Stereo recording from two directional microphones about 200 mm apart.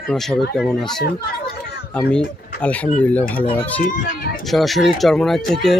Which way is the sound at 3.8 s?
40° left (ahead or behind).